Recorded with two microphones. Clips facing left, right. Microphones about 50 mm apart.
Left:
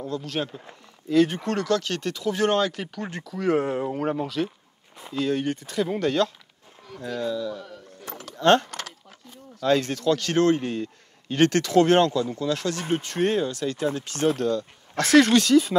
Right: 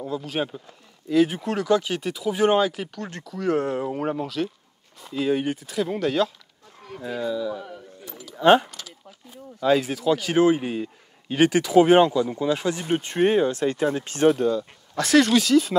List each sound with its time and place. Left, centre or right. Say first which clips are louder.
0.0 s speech: right 2 dB; centre
5.1 s speech: right 2 dB; centre
8.0 s a sound: left 2 dB; left
8.4 s speech: right 2 dB; centre
8.6 s a sound: left 5 dB; left
9.3 s speech: right 2 dB; centre; by 14.1 s right
14.3 s speech: right 2 dB; centre